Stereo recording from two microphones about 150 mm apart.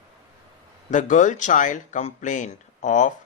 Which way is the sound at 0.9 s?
55° left (ahead or behind).